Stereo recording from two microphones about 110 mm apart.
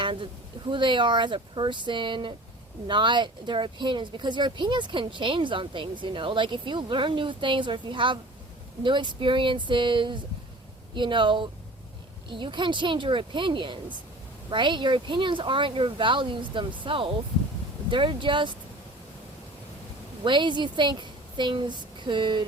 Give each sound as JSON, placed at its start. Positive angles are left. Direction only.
{"t": 0.0, "sound": "speech", "side_deg": -50}
{"t": 20.2, "sound": "speech", "side_deg": -45}